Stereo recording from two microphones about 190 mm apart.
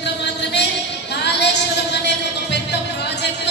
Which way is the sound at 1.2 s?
65° left (ahead or behind).